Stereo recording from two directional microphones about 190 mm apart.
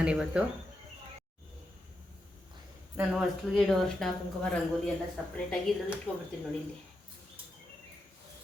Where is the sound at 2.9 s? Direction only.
Centre (ahead or behind).